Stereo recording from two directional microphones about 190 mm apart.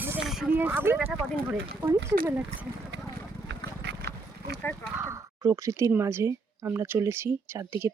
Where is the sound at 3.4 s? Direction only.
65° right (ahead or behind).